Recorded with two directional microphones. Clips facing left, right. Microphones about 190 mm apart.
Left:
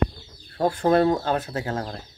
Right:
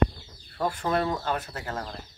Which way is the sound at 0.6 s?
30° left (ahead or behind).